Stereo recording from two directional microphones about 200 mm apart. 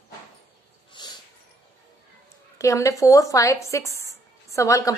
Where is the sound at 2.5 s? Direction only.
15° left (ahead or behind).